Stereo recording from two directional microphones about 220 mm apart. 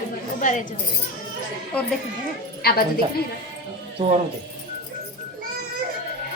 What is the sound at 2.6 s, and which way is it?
Speech, 45° left (ahead or behind).